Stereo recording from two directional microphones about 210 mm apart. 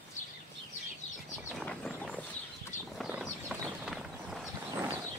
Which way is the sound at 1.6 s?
5° left (ahead or behind).